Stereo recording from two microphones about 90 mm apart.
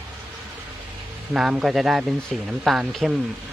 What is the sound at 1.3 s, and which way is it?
Speech, 5° right (ahead or behind).